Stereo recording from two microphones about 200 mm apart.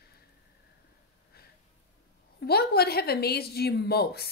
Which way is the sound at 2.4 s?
50° left (ahead or behind).